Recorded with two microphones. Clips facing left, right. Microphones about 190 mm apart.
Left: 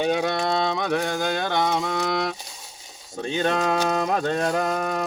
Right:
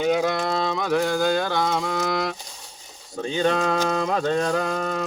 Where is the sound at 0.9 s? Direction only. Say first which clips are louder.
Right 3 dB; 20° left (ahead or behind).